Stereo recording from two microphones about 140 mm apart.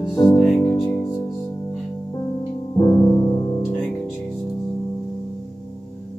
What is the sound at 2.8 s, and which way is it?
Music, 25° left (ahead or behind).